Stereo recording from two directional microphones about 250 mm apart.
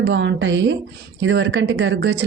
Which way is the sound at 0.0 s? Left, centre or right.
Right.